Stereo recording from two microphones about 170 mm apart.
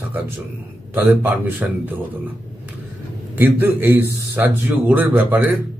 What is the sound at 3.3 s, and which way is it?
A man's voice, 10° right (ahead or behind).